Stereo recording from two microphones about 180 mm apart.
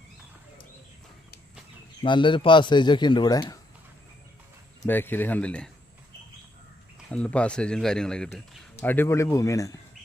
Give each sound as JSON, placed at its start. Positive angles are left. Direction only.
{"t": 2.0, "sound": "a man's voice", "side_deg": 25}
{"t": 4.9, "sound": "speech", "side_deg": 10}
{"t": 7.1, "sound": "speech", "side_deg": 5}